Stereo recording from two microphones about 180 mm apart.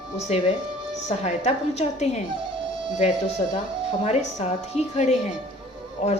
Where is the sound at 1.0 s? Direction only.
40° left (ahead or behind).